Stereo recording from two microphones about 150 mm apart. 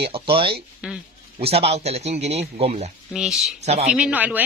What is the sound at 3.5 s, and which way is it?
Speech, 45° right (ahead or behind).